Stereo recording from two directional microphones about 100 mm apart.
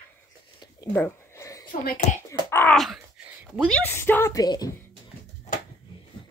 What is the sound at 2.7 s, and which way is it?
Groan, centre (ahead or behind).